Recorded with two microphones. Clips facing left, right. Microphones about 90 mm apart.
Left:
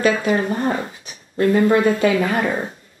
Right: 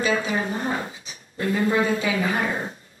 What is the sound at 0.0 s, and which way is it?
Speech, 55° left (ahead or behind).